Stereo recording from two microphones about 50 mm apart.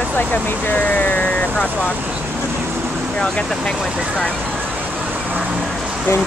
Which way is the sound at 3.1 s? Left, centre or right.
Centre.